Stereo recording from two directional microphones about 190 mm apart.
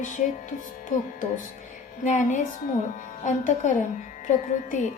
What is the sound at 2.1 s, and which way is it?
A woman's voice, 40° left (ahead or behind).